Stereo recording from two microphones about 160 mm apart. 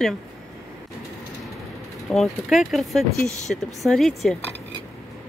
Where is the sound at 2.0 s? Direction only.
Centre (ahead or behind).